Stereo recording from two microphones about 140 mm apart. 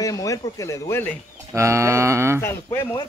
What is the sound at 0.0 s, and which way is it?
Speech, 25° left (ahead or behind).